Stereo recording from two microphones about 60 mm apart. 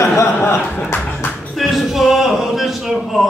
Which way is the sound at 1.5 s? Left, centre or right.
Centre.